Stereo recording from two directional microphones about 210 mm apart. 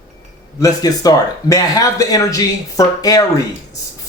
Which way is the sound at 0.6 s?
15° left (ahead or behind).